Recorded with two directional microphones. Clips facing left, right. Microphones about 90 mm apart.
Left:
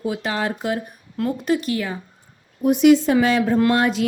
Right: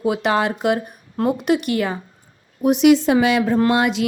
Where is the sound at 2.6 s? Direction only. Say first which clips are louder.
Even; 90° right.